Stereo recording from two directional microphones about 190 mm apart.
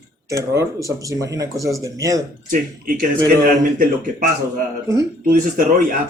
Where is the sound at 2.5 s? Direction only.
45° right (ahead or behind).